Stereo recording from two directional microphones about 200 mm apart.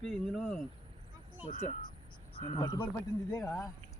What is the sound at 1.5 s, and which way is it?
Speech, 40° left (ahead or behind).